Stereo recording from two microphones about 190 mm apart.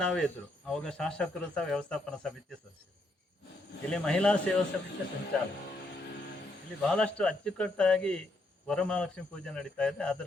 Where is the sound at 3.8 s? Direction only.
5° left (ahead or behind).